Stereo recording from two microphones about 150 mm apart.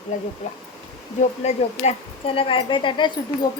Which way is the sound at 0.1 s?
55° left (ahead or behind).